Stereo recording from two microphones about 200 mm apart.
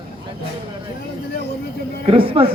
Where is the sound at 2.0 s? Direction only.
25° right (ahead or behind).